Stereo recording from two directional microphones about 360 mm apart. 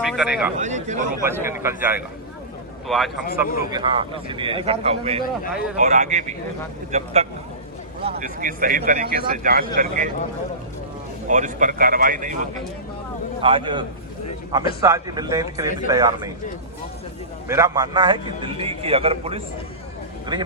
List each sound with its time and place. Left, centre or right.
0.0 s speech: centre
0.5 s a man's voice: centre
1.2 s a man's voice: centre
3.7 s a man's voice: centre
5.2 s speech: left
5.7 s a man's voice: centre
11.3 s a man's voice: right
17.5 s a man's voice: centre